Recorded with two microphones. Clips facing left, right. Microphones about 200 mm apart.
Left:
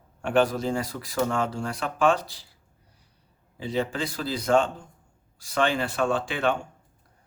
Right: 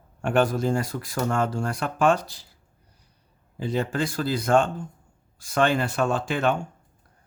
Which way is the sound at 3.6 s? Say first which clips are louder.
Right 2 dB; 50° right (ahead or behind).